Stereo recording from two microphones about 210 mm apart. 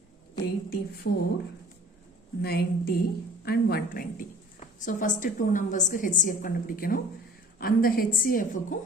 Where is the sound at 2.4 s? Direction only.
50° left (ahead or behind).